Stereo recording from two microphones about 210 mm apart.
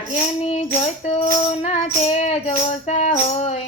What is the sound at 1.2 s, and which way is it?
Music, 30° left (ahead or behind).